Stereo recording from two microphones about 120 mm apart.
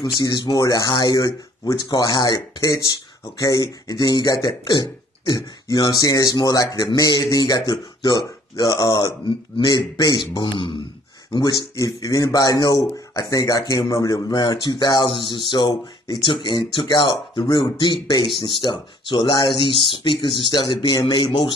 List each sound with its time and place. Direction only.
0.2 s speech: 35° left (ahead or behind)